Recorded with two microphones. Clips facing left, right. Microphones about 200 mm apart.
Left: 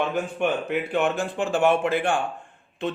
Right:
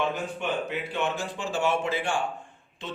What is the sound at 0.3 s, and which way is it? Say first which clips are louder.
Speech: left 6 dB; 55° left (ahead or behind).